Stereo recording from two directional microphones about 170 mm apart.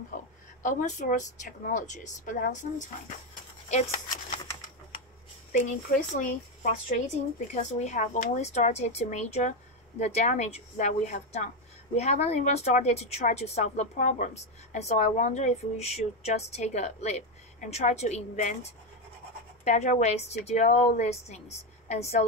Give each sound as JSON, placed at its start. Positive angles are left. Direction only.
{"t": 0.6, "sound": "a woman's voice", "side_deg": 50}
{"t": 6.1, "sound": "speech", "side_deg": 50}